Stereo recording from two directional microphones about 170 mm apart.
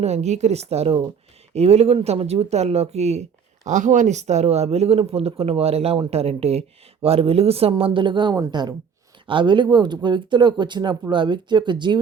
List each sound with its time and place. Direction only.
0.0 s speech: 40° right (ahead or behind)